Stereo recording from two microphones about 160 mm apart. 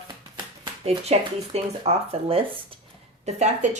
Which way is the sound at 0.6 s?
40° right (ahead or behind).